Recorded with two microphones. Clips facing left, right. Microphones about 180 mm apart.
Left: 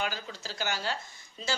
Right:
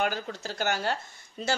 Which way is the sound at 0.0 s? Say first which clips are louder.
Right 5 dB; 55° right (ahead or behind).